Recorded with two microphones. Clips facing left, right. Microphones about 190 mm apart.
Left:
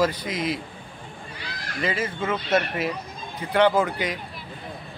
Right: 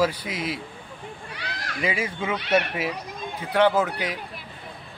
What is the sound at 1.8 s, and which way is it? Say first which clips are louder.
A man's voice: left 1 dB; 10° right (ahead or behind).